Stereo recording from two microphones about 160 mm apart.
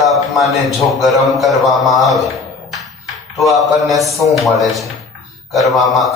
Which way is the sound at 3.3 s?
Centre (ahead or behind).